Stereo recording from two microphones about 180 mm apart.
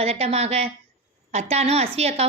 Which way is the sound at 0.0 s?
35° right (ahead or behind).